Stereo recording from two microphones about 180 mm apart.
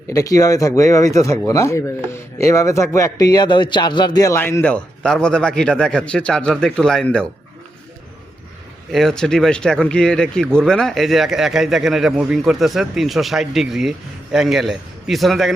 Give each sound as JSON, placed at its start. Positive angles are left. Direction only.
{"t": 0.1, "sound": "chopping", "side_deg": 20}
{"t": 8.9, "sound": "speech", "side_deg": 0}